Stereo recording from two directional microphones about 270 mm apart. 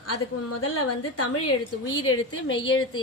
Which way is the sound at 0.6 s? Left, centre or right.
Left.